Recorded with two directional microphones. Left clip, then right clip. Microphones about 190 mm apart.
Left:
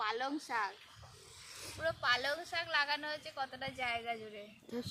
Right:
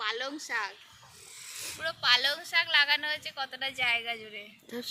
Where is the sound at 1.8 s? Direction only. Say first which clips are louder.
Right 8 dB; 45° left (ahead or behind).